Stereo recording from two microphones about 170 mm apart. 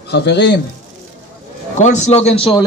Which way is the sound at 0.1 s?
85° left.